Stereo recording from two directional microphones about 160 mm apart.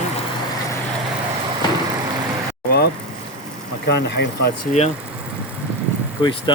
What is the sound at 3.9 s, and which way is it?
Speech, 90° left.